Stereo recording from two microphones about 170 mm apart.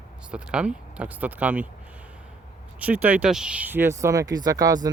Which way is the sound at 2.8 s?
10° right (ahead or behind).